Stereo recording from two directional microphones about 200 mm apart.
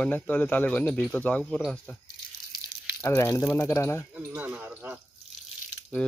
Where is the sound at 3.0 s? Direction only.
15° left (ahead or behind).